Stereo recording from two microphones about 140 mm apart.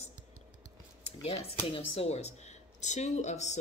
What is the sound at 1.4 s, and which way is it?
A woman's voice, 45° left (ahead or behind).